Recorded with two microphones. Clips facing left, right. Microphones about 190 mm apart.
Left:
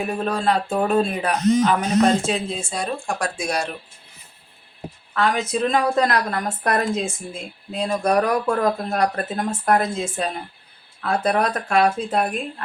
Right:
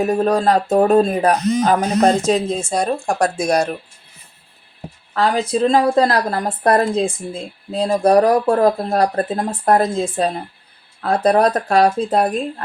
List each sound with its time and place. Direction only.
0.0 s a woman's voice: 40° right (ahead or behind)
5.1 s a woman's voice: 35° right (ahead or behind)